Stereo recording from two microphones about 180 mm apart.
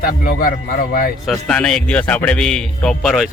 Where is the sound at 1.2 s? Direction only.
5° left (ahead or behind).